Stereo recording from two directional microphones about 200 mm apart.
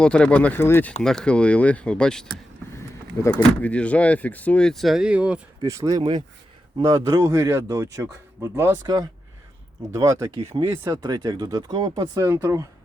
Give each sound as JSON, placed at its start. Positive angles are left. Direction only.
{"t": 0.0, "sound": "speech", "side_deg": 5}